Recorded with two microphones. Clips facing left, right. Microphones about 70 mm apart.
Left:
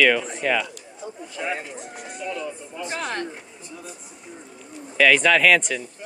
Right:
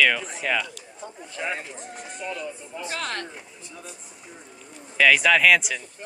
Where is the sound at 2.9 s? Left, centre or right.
Centre.